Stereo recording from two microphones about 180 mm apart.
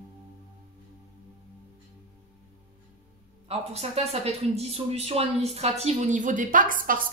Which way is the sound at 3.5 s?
35° right (ahead or behind).